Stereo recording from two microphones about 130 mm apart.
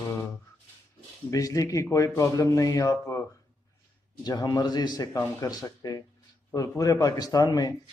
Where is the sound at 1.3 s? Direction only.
25° left (ahead or behind).